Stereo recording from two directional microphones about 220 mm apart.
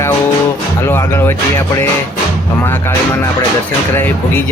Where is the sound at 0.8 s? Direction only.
10° left (ahead or behind).